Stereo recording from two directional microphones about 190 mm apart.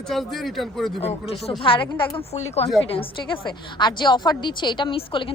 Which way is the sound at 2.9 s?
25° left (ahead or behind).